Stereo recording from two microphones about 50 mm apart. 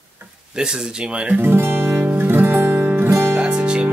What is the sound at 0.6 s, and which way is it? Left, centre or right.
Speech, centre.